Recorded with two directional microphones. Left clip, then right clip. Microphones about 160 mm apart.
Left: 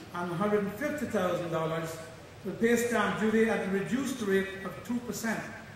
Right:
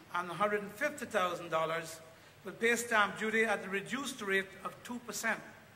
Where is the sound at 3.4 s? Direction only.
30° left (ahead or behind).